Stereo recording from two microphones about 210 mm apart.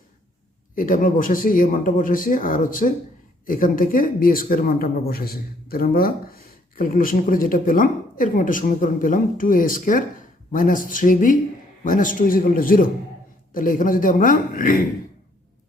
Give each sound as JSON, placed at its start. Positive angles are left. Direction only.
{"t": 0.8, "sound": "speech", "side_deg": 40}